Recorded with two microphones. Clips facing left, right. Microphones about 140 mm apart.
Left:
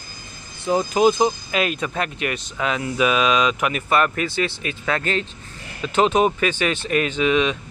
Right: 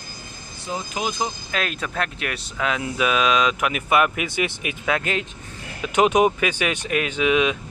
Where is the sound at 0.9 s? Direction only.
30° left (ahead or behind).